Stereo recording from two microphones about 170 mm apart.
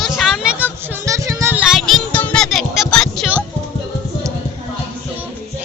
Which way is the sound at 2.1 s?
5° left (ahead or behind).